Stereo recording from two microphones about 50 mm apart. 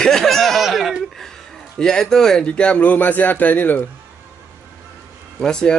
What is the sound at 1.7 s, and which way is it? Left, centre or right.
Speech, centre.